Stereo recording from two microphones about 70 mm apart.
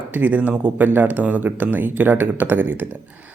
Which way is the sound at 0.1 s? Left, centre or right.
Right.